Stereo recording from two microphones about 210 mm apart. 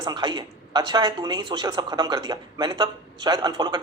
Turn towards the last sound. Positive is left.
turn(degrees=-20)  # may be behind; listen again after turning